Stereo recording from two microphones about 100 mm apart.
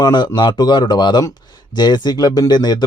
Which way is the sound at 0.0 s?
45° left (ahead or behind).